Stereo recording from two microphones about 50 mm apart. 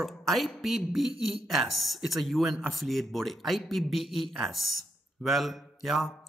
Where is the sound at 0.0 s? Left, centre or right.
Centre.